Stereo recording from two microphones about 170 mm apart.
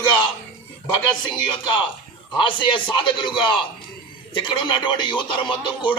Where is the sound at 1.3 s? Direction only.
25° left (ahead or behind).